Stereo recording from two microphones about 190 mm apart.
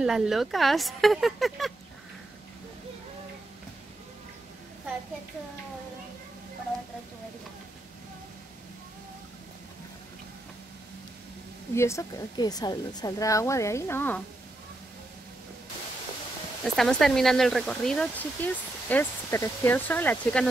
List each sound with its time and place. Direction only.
0.0 s speech: centre (ahead or behind)
11.7 s a woman's voice: 15° left (ahead or behind)
16.6 s speech: centre (ahead or behind)